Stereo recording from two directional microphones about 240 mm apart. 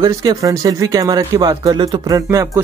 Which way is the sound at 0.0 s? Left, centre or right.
Centre.